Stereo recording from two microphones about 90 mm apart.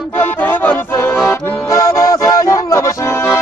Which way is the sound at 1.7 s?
35° left (ahead or behind).